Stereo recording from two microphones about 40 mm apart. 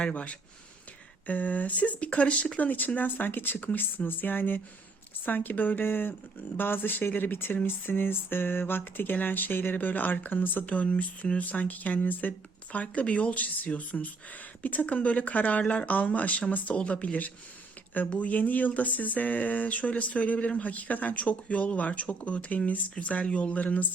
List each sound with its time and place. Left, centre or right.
0.1 s speech: left
2.6 s speech: left
10.7 s speech: left